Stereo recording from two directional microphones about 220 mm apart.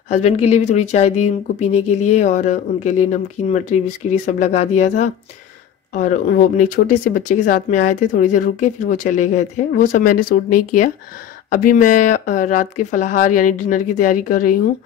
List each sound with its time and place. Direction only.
0.1 s speech: 30° left (ahead or behind)